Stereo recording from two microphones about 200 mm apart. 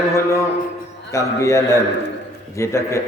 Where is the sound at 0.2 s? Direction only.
15° left (ahead or behind).